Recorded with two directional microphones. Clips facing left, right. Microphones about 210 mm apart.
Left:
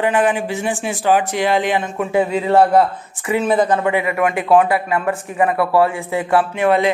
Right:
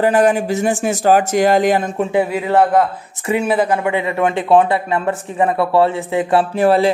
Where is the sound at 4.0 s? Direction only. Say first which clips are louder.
Right 1 dB; 30° right (ahead or behind).